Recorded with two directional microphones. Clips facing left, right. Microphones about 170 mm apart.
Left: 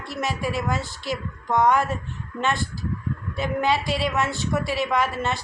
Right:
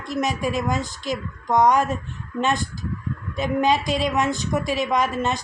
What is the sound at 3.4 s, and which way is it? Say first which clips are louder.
A woman's voice: right 3 dB; 15° right (ahead or behind).